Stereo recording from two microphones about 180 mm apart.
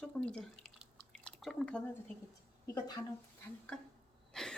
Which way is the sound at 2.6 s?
20° left (ahead or behind).